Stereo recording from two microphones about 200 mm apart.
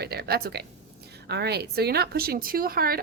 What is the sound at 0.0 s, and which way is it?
Speech, 55° right (ahead or behind).